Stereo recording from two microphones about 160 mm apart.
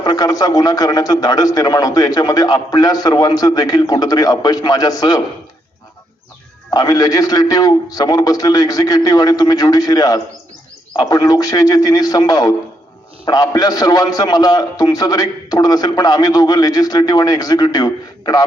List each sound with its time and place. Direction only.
0.0 s a man's voice: 25° left (ahead or behind)
6.7 s a man's voice: 25° left (ahead or behind)